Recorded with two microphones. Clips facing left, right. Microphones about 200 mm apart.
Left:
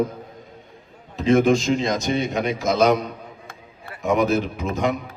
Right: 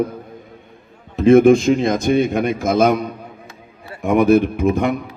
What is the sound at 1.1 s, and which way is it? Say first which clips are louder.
A man's voice: right 7 dB; 55° right (ahead or behind).